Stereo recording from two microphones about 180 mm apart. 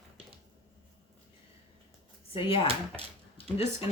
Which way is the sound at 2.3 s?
30° left (ahead or behind).